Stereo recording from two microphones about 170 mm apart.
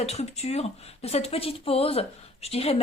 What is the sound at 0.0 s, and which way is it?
Speech, 40° left (ahead or behind).